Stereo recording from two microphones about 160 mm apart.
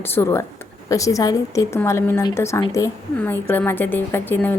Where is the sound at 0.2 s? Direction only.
15° left (ahead or behind).